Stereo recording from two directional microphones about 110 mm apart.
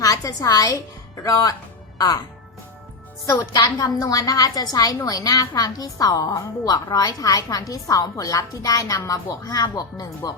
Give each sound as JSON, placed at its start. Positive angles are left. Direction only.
{"t": 0.0, "sound": "a woman's voice", "side_deg": 30}
{"t": 3.2, "sound": "speech", "side_deg": 35}